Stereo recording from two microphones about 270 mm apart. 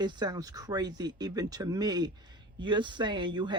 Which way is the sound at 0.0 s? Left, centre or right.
Centre.